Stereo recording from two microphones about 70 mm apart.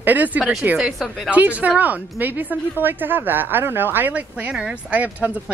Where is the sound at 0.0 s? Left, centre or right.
Right.